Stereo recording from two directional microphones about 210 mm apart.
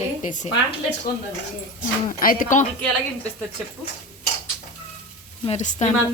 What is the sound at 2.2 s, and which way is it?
Speech, 40° left (ahead or behind).